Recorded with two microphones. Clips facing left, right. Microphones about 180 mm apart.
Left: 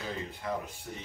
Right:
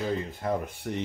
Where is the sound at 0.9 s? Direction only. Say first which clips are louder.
Right 10 dB; 60° right (ahead or behind).